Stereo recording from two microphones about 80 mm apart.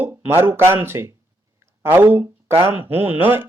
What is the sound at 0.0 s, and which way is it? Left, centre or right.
Speech, right.